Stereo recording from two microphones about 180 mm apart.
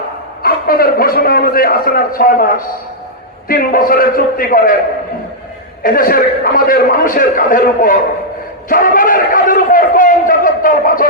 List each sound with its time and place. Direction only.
0.4 s a man's voice: 55° left (ahead or behind)
5.8 s a man's voice: 50° left (ahead or behind)
8.7 s a sound: 50° left (ahead or behind)